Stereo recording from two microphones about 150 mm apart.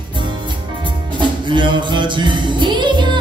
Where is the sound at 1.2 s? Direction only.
30° right (ahead or behind).